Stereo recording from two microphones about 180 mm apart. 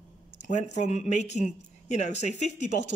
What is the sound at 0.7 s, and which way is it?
Speech, 40° left (ahead or behind).